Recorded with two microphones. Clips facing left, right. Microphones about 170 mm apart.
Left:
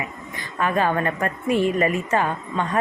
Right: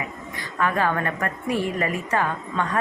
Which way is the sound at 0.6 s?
20° left (ahead or behind).